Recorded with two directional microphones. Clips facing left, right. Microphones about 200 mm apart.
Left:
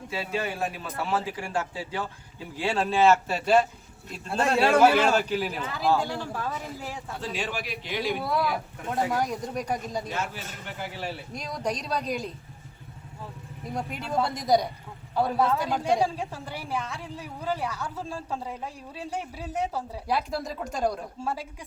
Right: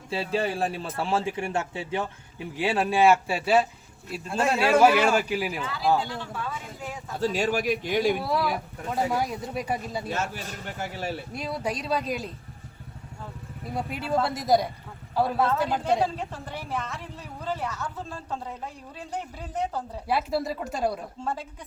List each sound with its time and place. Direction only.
0.1 s a man's voice: 30° right (ahead or behind); by 5.6 s 10° right (ahead or behind)
6.1 s a man's voice: 40° left (ahead or behind)
7.2 s a man's voice: 45° right (ahead or behind)
8.2 s speech: centre (ahead or behind)
10.1 s a man's voice: 45° right (ahead or behind)
11.3 s speech: 5° right (ahead or behind)
13.7 s speech: 5° right (ahead or behind)
16.0 s speech: 10° left (ahead or behind)
20.1 s speech: 5° right (ahead or behind)
21.2 s speech: 10° left (ahead or behind)